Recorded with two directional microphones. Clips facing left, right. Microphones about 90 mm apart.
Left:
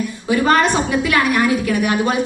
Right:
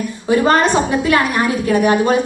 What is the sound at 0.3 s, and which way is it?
A woman's voice, 30° right (ahead or behind).